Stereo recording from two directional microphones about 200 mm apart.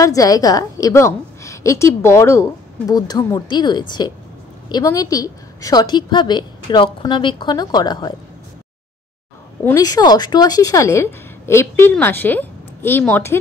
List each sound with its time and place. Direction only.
0.0 s a woman's voice: 15° left (ahead or behind)
9.7 s a woman's voice: 20° left (ahead or behind)